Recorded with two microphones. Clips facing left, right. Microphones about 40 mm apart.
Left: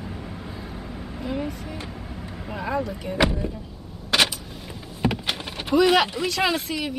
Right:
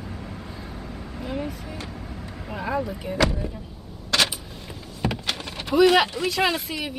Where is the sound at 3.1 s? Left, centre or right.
Centre.